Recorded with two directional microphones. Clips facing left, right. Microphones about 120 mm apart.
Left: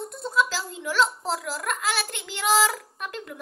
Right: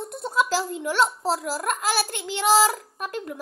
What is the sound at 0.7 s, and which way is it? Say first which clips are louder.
A woman's voice: right 2 dB; 45° right (ahead or behind).